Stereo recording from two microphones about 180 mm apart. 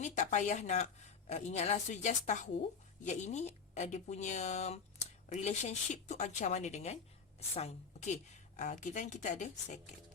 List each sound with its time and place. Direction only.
0.0 s speech: 40° left (ahead or behind)